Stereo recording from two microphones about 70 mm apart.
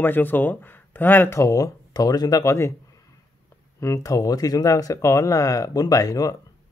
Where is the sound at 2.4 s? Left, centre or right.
Left.